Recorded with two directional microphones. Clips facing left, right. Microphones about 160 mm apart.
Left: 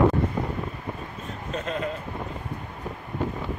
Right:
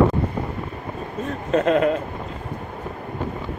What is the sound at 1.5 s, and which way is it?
Speech, 85° right.